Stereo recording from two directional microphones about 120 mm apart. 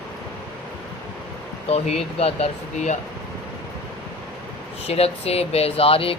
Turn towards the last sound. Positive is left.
turn(degrees=50)  # may be behind; listen again after turning